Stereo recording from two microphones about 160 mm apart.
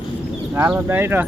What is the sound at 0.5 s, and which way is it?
Speech, 15° right (ahead or behind).